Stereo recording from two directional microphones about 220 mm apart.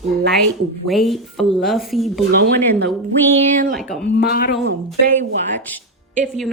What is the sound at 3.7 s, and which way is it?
Speech, centre (ahead or behind).